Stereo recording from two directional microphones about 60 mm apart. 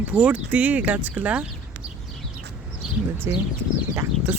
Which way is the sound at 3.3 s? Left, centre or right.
Right.